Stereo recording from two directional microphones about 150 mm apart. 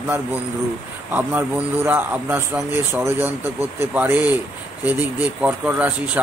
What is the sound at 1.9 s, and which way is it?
Speech, 15° right (ahead or behind).